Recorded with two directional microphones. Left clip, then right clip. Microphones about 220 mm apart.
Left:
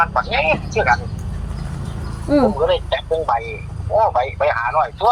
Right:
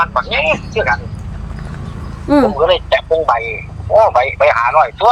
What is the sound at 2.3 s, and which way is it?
A man's voice, 40° right (ahead or behind).